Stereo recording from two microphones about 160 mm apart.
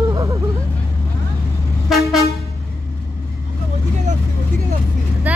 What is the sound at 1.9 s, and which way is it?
Vehicle, centre (ahead or behind).